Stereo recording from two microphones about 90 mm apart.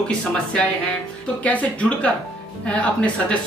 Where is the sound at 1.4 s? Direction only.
15° left (ahead or behind).